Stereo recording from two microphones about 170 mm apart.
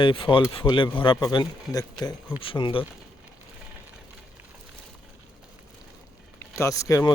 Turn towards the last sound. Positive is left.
turn(degrees=20)  # may be behind; listen again after turning